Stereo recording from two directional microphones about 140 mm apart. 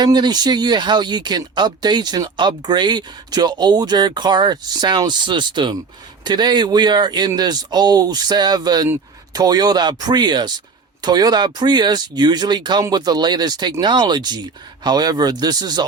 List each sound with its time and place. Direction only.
0.0 s speech: 30° right (ahead or behind)